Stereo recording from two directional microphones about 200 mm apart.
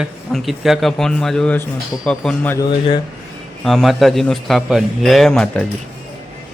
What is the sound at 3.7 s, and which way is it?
Speech, centre (ahead or behind).